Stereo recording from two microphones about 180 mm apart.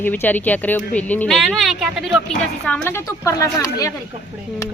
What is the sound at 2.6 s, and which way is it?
Speech, 10° left (ahead or behind).